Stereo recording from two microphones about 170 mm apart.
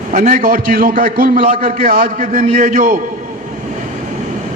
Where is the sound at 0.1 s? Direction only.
50° right (ahead or behind).